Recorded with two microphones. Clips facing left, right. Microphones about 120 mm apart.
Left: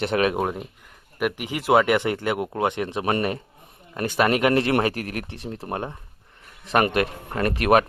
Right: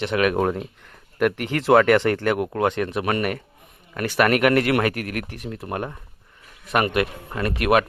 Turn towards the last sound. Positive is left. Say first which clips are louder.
# left 1 dB
turn(degrees=35)  # may be behind; listen again after turning